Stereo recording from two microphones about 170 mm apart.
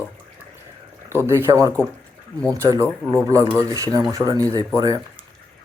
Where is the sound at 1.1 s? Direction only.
15° right (ahead or behind).